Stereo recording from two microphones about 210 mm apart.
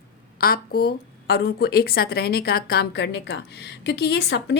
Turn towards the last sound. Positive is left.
turn(degrees=55)  # may be behind; listen again after turning